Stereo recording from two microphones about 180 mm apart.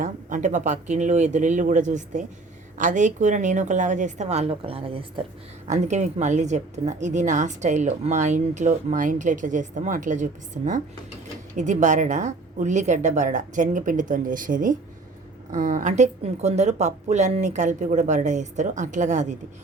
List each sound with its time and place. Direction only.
0.0 s speech: 45° right (ahead or behind)
5.6 s speech: 40° right (ahead or behind)